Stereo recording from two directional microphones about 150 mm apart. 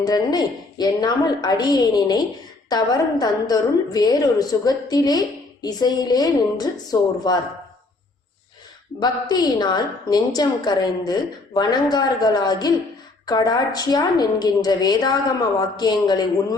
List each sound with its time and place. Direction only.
0.0 s a woman's voice: 25° left (ahead or behind)
9.0 s a woman's voice: 30° left (ahead or behind)